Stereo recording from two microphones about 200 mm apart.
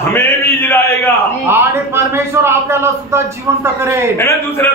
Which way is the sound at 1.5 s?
10° right (ahead or behind).